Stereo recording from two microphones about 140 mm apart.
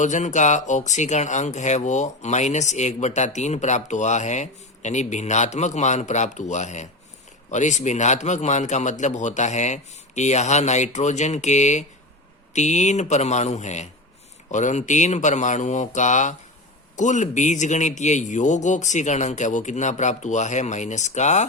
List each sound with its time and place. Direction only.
0.0 s a man's voice: 60° left (ahead or behind)